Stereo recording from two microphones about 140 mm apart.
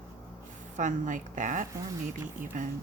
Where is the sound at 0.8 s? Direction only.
65° right (ahead or behind).